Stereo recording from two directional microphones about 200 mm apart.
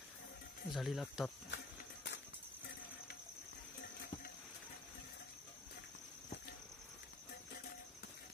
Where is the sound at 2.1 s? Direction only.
65° left (ahead or behind).